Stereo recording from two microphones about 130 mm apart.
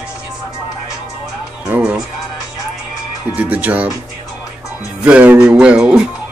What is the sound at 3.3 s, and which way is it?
Speech, 10° right (ahead or behind).